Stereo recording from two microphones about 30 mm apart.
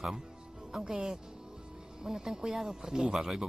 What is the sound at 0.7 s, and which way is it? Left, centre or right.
Speech, right.